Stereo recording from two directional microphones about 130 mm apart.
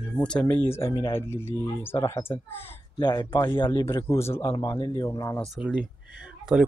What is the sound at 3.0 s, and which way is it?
Speech, 35° left (ahead or behind).